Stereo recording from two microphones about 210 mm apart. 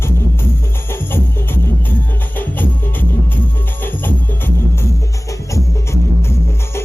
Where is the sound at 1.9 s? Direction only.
10° left (ahead or behind).